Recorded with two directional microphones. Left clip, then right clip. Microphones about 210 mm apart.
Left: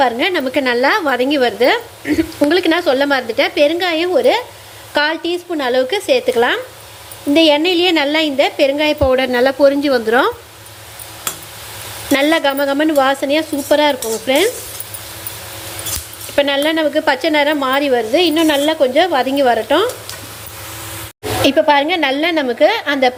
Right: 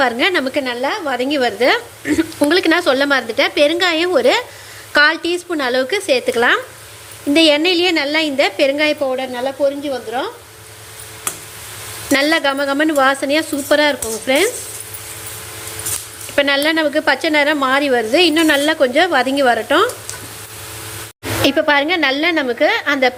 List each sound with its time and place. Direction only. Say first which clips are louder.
0.0 s a woman's voice: even; centre (ahead or behind)
0.6 s a woman's voice: left 6 dB; 15° left (ahead or behind)
9.0 s speech: left 6 dB; 25° left (ahead or behind)
12.1 s a woman's voice: left 1 dB; 5° left (ahead or behind)
16.3 s a woman's voice: even; centre (ahead or behind)
21.4 s a woman's voice: left 2 dB; centre (ahead or behind)